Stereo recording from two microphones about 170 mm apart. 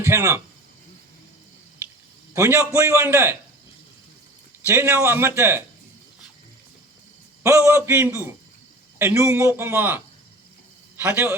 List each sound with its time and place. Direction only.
0.0 s a man's voice: 15° right (ahead or behind)
2.3 s a man's voice: 15° right (ahead or behind)
4.6 s a man's voice: 15° right (ahead or behind)
7.4 s a man's voice: 15° right (ahead or behind)